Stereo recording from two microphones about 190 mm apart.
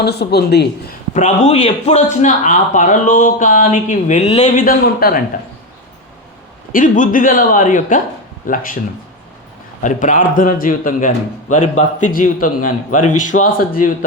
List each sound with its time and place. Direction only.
0.0 s speech: 60° left (ahead or behind)
1.1 s a man's voice: 40° left (ahead or behind)
6.7 s a man's voice: 45° left (ahead or behind)
9.8 s a man's voice: 40° left (ahead or behind)